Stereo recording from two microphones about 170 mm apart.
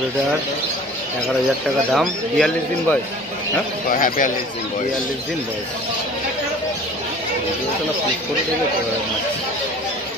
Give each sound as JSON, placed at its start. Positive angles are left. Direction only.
{"t": 1.9, "sound": "speech", "side_deg": 0}
{"t": 3.9, "sound": "a man's voice", "side_deg": 55}